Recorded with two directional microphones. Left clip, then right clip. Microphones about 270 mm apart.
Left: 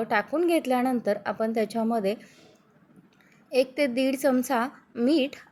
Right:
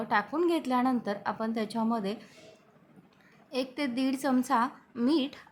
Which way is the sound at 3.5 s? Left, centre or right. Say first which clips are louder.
Left 9 dB; centre.